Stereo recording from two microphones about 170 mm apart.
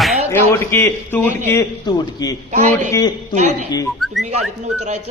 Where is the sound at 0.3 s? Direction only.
15° left (ahead or behind).